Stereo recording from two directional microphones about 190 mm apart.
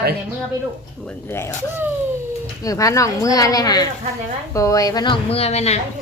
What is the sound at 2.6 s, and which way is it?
A woman's voice, 15° left (ahead or behind).